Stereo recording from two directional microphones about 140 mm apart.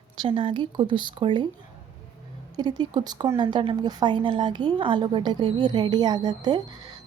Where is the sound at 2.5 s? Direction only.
30° right (ahead or behind).